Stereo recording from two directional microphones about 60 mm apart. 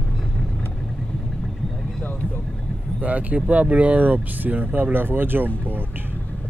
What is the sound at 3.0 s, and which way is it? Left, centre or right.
Speech, right.